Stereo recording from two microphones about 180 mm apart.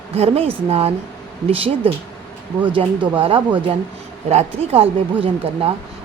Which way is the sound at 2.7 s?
30° right (ahead or behind).